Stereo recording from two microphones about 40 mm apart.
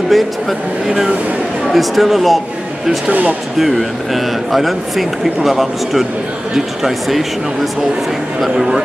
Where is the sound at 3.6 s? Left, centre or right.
Centre.